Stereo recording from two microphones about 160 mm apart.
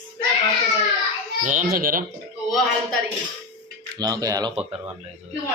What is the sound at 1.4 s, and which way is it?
Speech, 50° right (ahead or behind).